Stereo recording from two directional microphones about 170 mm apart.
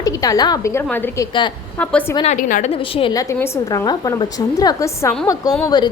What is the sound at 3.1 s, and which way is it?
A woman's voice, 20° left (ahead or behind).